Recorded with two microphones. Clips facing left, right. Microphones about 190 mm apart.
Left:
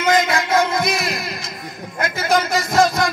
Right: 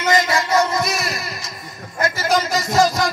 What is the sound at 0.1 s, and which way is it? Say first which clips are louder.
Music: even; 55° left (ahead or behind).